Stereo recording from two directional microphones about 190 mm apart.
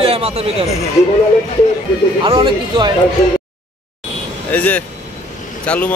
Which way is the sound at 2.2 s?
25° right (ahead or behind).